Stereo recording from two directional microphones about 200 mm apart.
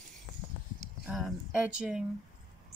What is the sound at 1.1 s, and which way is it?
Speech, 5° right (ahead or behind).